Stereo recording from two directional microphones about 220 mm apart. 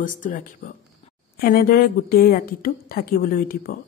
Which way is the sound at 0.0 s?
35° left (ahead or behind).